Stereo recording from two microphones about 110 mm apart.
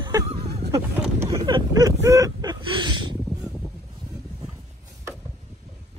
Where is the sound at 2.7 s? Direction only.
45° right (ahead or behind).